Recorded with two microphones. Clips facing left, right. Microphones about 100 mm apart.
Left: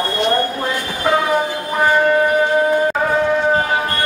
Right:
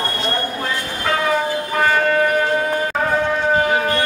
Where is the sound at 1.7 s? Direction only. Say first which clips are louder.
Left 3 dB; 15° left (ahead or behind).